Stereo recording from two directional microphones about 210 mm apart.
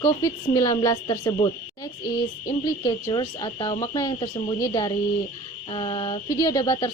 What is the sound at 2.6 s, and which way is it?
Speech, 20° left (ahead or behind).